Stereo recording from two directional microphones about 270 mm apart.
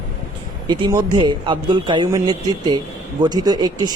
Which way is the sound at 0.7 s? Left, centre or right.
Centre.